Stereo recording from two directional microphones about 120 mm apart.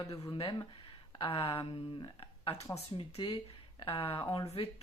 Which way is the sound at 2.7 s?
50° left (ahead or behind).